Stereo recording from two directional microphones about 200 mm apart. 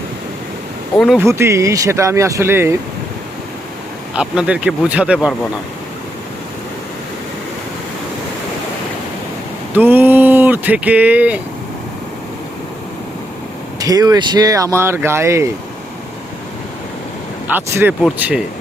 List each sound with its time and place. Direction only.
0.9 s speech: centre (ahead or behind)
1.2 s speech: 15° right (ahead or behind)
4.1 s speech: 5° right (ahead or behind)
9.7 s speech: 10° right (ahead or behind)
13.7 s speech: 20° right (ahead or behind)
17.5 s speech: 10° right (ahead or behind)